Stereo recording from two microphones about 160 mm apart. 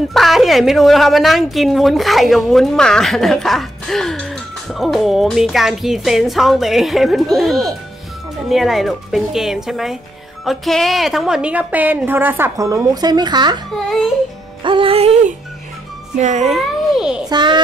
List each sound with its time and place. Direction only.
0.1 s a woman's voice: centre (ahead or behind); by 13.6 s 25° right (ahead or behind)
13.7 s a woman's voice: centre (ahead or behind)
14.6 s speech: 35° right (ahead or behind)
16.5 s a woman's voice: 5° right (ahead or behind)
17.3 s a child's voice: 25° right (ahead or behind)